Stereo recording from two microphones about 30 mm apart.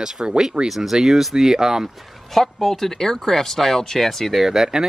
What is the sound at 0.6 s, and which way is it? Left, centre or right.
Speech, centre.